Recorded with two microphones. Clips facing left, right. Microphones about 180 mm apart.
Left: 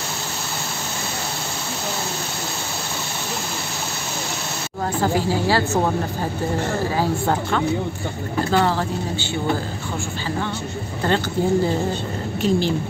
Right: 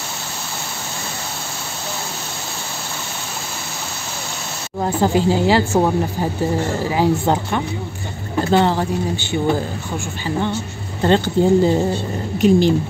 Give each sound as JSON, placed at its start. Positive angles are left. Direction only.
{"t": 4.8, "sound": "speech", "side_deg": -20}
{"t": 6.8, "sound": "speech", "side_deg": -15}
{"t": 11.0, "sound": "speech", "side_deg": -20}